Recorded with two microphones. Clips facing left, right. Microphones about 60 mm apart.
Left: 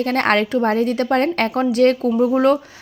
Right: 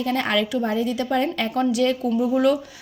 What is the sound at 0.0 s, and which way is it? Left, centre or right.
Speech, left.